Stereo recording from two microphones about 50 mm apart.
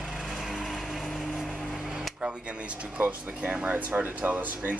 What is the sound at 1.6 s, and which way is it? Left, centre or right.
Music, centre.